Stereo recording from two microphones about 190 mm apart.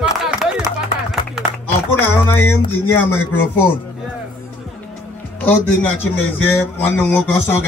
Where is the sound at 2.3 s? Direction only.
10° left (ahead or behind).